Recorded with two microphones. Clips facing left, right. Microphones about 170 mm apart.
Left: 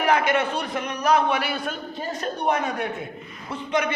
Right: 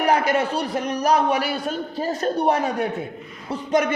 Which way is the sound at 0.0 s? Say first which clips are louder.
Right 2 dB; 35° right (ahead or behind).